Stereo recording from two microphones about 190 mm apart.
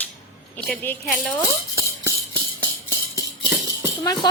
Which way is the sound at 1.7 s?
15° right (ahead or behind).